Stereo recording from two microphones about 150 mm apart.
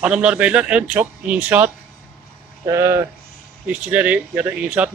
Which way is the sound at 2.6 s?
20° right (ahead or behind).